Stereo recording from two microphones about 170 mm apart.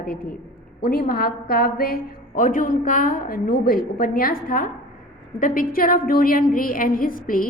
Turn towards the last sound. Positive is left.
turn(degrees=55)  # may be behind; listen again after turning